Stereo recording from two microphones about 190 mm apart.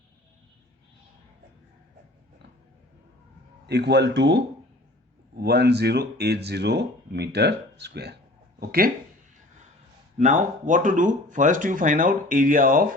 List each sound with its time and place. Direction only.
3.7 s speech: 60° right (ahead or behind)
10.2 s speech: 40° right (ahead or behind)